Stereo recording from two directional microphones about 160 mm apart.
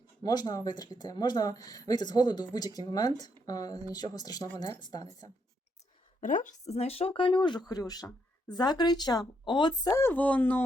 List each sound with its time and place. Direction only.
0.2 s speech: 25° left (ahead or behind)
6.1 s speech: 55° left (ahead or behind); by 10.6 s 10° left (ahead or behind)